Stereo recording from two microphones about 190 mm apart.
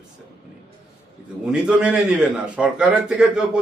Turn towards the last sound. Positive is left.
turn(degrees=-5)  # may be behind; listen again after turning